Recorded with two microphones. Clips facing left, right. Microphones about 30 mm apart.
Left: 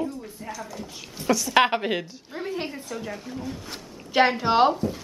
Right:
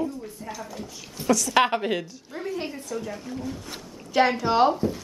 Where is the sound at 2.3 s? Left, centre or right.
Left.